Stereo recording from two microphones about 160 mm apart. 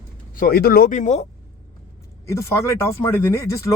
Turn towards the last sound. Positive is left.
turn(degrees=20)  # may be behind; listen again after turning